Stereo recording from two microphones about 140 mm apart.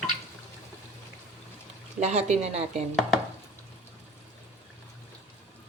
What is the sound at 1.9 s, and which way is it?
Speech, 55° right (ahead or behind).